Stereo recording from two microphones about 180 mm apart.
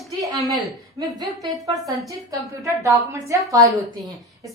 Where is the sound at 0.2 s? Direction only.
20° right (ahead or behind).